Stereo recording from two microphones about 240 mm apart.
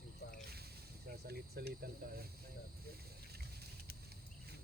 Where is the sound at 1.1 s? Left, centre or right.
Right.